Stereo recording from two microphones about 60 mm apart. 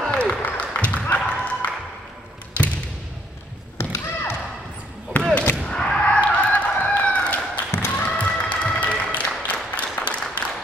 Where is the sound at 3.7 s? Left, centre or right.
Left.